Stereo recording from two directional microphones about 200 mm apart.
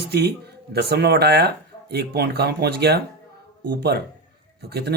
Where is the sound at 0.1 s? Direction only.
55° right (ahead or behind).